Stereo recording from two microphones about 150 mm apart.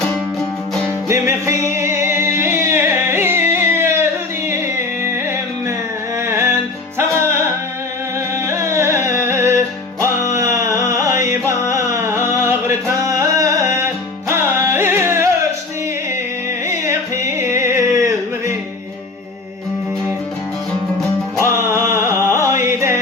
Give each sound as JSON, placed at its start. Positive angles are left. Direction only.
{"t": 1.0, "sound": "music", "side_deg": -20}
{"t": 6.2, "sound": "music", "side_deg": -20}
{"t": 8.4, "sound": "music", "side_deg": -20}
{"t": 10.3, "sound": "a sound", "side_deg": -20}
{"t": 16.6, "sound": "music", "side_deg": -20}
{"t": 21.3, "sound": "music", "side_deg": -20}